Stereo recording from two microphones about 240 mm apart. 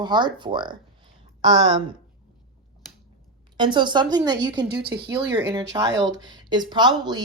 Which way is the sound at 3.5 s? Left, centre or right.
Centre.